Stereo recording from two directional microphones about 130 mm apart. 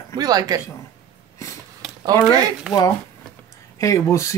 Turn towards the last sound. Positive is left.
turn(degrees=25)  # may be behind; listen again after turning